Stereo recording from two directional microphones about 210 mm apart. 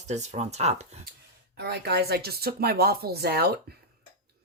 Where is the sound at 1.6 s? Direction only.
50° right (ahead or behind).